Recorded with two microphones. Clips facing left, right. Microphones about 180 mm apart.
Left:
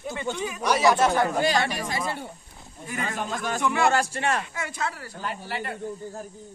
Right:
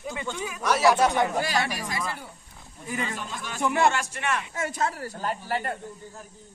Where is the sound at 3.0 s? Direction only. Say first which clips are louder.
Left 5 dB; 50° left (ahead or behind).